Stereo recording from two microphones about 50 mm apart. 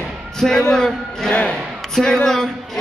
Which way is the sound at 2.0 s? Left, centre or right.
Centre.